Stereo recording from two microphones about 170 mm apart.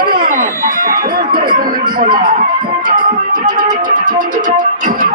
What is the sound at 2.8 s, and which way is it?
Music, 50° right (ahead or behind).